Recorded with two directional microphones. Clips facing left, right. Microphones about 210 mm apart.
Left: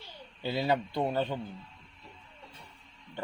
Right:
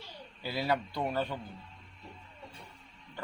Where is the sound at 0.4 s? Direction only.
25° left (ahead or behind).